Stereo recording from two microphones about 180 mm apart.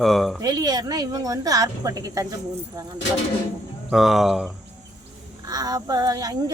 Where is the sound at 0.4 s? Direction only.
20° right (ahead or behind).